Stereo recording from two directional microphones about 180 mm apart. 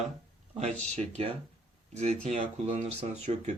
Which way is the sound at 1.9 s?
40° right (ahead or behind).